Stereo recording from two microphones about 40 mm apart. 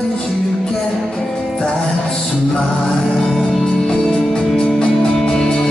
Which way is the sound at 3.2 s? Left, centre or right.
Centre.